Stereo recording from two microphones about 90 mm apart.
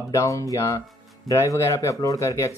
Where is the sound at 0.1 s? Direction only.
35° left (ahead or behind).